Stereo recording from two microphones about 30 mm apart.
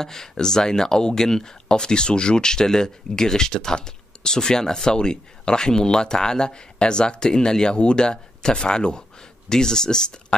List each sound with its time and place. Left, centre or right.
0.0 s speech: centre